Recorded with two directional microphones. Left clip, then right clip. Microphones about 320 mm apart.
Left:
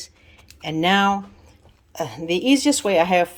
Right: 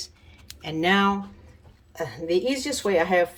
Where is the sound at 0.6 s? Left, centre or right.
Centre.